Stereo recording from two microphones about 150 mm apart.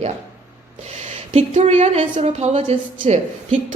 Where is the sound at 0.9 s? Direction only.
45° right (ahead or behind).